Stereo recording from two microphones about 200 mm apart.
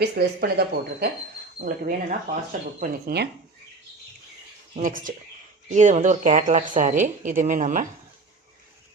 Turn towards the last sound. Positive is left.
turn(degrees=-40)  # may be behind; listen again after turning